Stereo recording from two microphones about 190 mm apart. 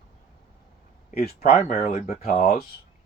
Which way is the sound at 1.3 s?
35° left (ahead or behind).